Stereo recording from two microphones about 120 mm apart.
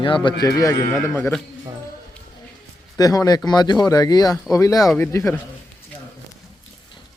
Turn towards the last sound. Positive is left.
turn(degrees=20)  # may be behind; listen again after turning